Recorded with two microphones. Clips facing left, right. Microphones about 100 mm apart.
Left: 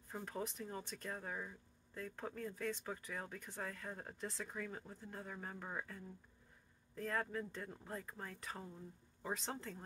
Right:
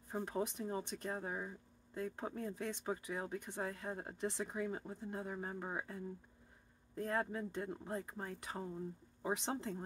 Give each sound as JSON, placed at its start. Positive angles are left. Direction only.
{"t": 0.1, "sound": "speech", "side_deg": -15}